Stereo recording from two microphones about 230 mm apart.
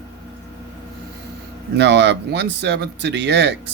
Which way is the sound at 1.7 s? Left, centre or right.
Right.